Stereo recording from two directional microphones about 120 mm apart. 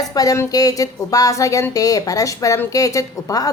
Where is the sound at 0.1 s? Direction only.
30° left (ahead or behind).